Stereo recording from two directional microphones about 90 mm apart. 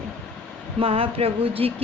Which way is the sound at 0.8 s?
90° right.